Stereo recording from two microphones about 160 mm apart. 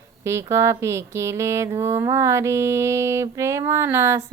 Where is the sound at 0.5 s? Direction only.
15° right (ahead or behind).